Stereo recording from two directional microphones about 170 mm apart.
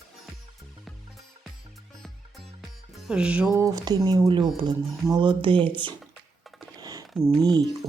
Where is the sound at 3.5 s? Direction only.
20° right (ahead or behind).